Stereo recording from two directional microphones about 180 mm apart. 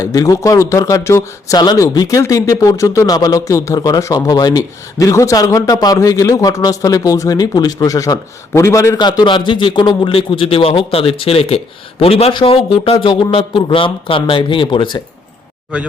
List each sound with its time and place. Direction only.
0.0 s speech: 20° left (ahead or behind)